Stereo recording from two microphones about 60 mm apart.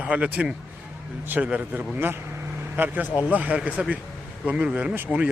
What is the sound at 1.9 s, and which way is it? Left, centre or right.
Vehicle, right.